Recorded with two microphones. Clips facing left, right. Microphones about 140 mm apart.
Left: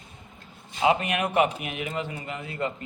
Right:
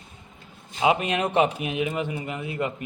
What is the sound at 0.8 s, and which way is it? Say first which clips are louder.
A man's voice: right 1 dB; 20° right (ahead or behind).